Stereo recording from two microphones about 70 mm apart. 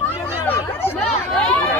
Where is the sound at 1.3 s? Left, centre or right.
Centre.